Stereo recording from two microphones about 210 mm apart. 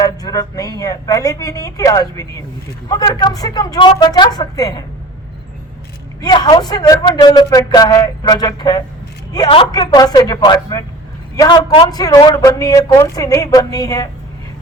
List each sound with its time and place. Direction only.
0.0 s a man's voice: 15° left (ahead or behind)
6.2 s a man's voice: 20° left (ahead or behind)